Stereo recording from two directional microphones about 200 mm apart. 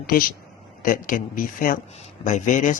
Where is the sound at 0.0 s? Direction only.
45° left (ahead or behind).